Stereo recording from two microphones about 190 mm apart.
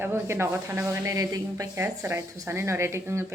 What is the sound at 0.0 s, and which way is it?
Speech, 10° right (ahead or behind).